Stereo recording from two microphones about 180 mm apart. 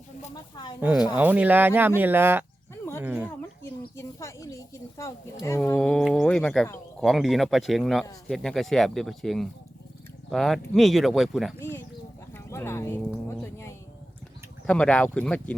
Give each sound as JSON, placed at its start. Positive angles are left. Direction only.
{"t": 0.3, "sound": "speech", "side_deg": 20}
{"t": 1.0, "sound": "speech", "side_deg": -10}
{"t": 3.2, "sound": "speech", "side_deg": 15}
{"t": 12.3, "sound": "speech", "side_deg": 15}